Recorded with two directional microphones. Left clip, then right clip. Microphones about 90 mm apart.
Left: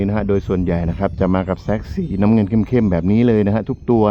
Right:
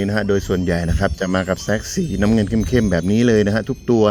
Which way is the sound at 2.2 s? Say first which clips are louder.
Left 2 dB; 45° left (ahead or behind).